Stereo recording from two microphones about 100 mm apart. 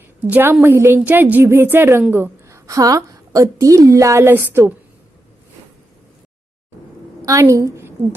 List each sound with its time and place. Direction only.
0.3 s a woman's voice: 20° right (ahead or behind)
7.3 s a woman's voice: 35° right (ahead or behind)